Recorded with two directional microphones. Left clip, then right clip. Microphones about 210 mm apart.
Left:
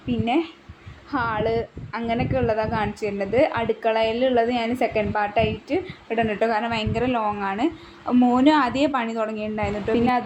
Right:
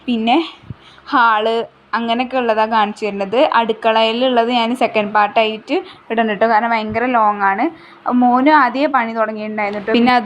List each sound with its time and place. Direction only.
0.1 s a woman's voice: 30° right (ahead or behind)
6.4 s a woman's voice: 15° right (ahead or behind)
9.9 s speech: 40° right (ahead or behind)